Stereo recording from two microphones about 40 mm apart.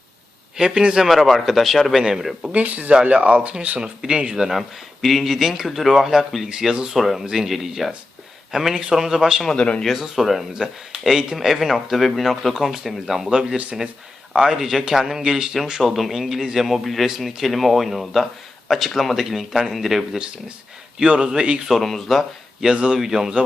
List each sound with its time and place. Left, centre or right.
0.5 s a man's voice: centre
1.0 s speech: centre
2.0 s a man's voice: centre
2.5 s speech: right
3.8 s a man's voice: centre
4.3 s a man's voice: centre
6.9 s a man's voice: centre
9.6 s speech: left
9.8 s a man's voice: centre
15.8 s speech: centre
21.0 s a man's voice: centre
21.7 s speech: centre
22.7 s a man's voice: right
23.0 s a man's voice: centre